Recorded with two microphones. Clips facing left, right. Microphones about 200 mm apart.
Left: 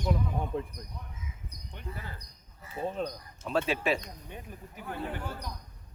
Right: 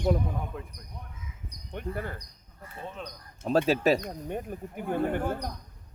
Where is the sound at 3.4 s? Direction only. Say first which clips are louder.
Right 6 dB; 40° right (ahead or behind).